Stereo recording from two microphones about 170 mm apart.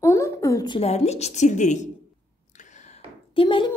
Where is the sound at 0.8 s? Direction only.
40° left (ahead or behind).